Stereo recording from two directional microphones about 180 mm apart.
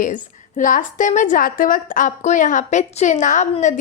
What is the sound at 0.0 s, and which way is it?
A woman's voice, 45° left (ahead or behind).